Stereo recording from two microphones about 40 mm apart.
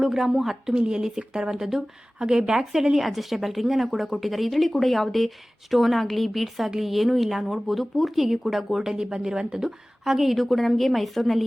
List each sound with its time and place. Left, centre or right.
0.0 s a woman's voice: centre
0.8 s a woman's voice: right
3.0 s a woman's voice: centre
8.8 s a woman's voice: centre